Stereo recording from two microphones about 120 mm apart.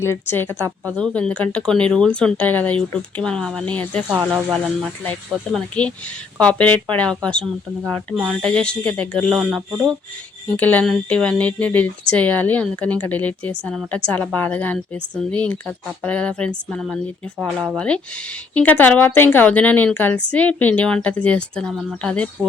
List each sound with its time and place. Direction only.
0.0 s a woman's voice: 20° left (ahead or behind)
4.1 s speech: 10° right (ahead or behind)
4.5 s speech: 5° right (ahead or behind)
5.5 s a woman's voice: 10° left (ahead or behind)
8.1 s speech: 5° right (ahead or behind)
8.4 s a woman's voice: 10° left (ahead or behind)
10.6 s a woman's voice: 10° left (ahead or behind)